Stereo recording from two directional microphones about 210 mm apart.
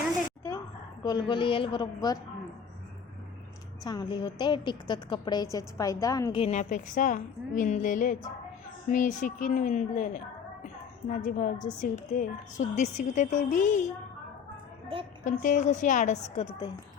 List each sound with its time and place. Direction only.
1.0 s a woman's voice: 20° left (ahead or behind)
3.8 s a woman's voice: 20° left (ahead or behind)
6.4 s a woman's voice: 35° left (ahead or behind)
15.2 s a woman's voice: 35° left (ahead or behind); by 16.8 s 20° left (ahead or behind)